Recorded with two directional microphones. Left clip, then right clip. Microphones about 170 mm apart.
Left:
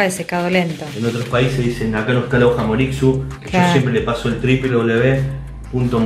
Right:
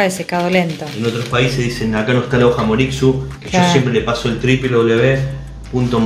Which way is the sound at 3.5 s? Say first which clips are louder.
Right 2 dB; 10° right (ahead or behind).